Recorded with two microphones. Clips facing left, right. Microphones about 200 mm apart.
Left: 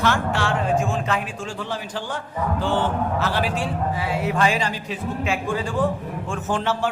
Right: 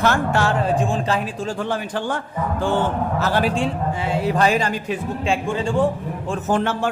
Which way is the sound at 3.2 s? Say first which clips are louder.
Right 6 dB; 45° right (ahead or behind).